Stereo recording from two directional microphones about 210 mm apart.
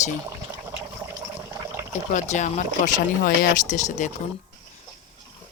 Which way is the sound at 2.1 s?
35° left (ahead or behind).